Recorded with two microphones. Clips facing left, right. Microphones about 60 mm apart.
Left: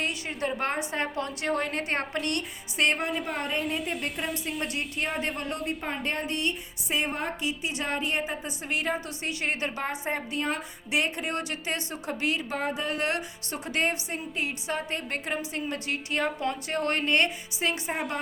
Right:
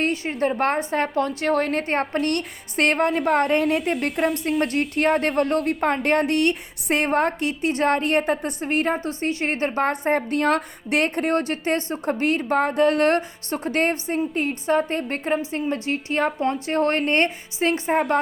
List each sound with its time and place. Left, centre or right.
0.0 s a woman's voice: right
2.2 s a woman's voice: right
4.3 s a woman's voice: centre
4.6 s a woman's voice: right
8.6 s a woman's voice: right
9.8 s a woman's voice: right